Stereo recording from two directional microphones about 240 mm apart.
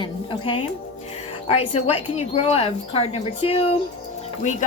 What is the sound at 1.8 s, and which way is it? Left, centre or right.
A woman's voice, left.